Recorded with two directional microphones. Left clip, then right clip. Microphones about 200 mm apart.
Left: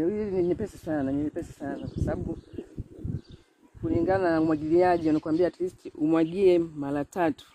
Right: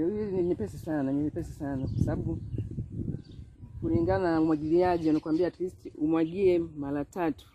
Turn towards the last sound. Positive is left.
turn(degrees=40)  # may be behind; listen again after turning